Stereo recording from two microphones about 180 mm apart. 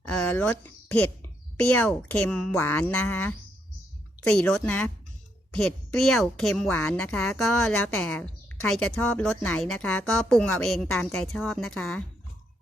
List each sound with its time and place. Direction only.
0.1 s a woman's voice: 10° left (ahead or behind)